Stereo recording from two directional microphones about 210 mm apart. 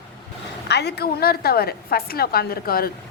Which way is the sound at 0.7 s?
50° left (ahead or behind).